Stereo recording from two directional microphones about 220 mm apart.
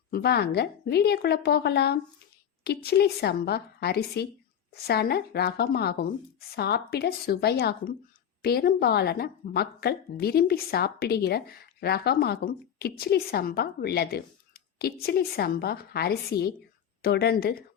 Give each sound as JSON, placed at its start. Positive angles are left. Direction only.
{"t": 0.1, "sound": "speech", "side_deg": 45}